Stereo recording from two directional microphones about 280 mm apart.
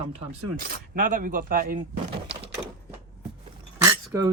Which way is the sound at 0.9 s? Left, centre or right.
Right.